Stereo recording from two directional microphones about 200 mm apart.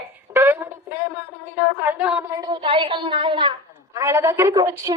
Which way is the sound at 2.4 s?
25° right (ahead or behind).